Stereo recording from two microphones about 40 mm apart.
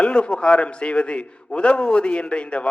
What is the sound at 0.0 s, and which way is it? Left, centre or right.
A man's voice, left.